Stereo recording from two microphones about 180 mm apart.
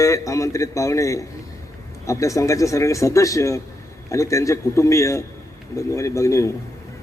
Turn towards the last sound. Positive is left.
turn(degrees=15)  # may be behind; listen again after turning